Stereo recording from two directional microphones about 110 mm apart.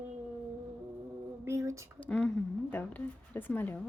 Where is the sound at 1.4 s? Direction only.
25° right (ahead or behind).